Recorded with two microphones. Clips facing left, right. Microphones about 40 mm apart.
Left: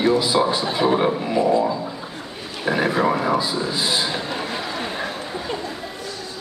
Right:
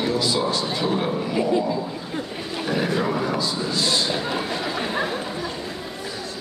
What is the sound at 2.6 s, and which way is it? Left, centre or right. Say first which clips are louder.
Speech: left 4 dB; centre.